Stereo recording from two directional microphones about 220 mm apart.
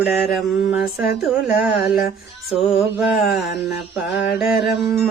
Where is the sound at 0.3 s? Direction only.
Centre (ahead or behind).